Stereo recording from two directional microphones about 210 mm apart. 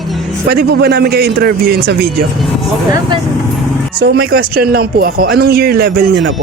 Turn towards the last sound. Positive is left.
turn(degrees=-45)  # may be behind; listen again after turning